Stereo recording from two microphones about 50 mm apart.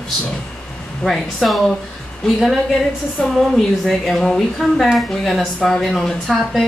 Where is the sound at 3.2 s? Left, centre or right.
Centre.